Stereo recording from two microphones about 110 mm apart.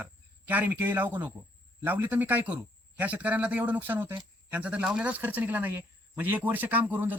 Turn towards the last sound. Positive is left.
turn(degrees=-15)  # may be behind; listen again after turning